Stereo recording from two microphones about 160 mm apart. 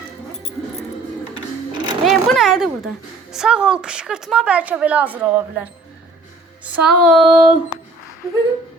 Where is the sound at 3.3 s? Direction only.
5° right (ahead or behind).